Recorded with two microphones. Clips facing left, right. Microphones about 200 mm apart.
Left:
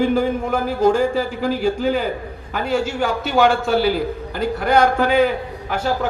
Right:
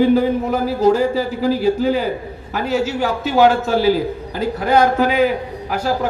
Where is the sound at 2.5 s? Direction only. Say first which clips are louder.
Right 1 dB; 5° right (ahead or behind).